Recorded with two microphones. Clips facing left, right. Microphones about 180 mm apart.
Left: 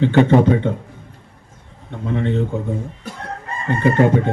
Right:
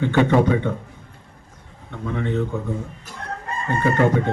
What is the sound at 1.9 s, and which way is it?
Speech, 20° left (ahead or behind).